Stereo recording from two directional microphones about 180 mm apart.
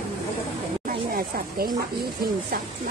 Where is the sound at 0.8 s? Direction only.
50° right (ahead or behind).